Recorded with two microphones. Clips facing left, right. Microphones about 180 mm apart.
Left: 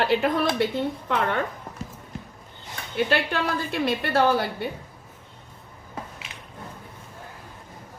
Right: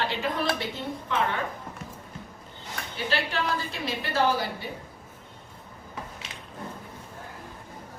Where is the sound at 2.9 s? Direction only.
55° left (ahead or behind).